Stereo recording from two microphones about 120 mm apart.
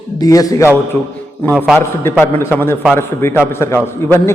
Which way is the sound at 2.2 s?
20° left (ahead or behind).